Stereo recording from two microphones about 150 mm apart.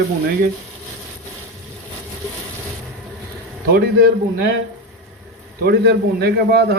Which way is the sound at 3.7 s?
90° right.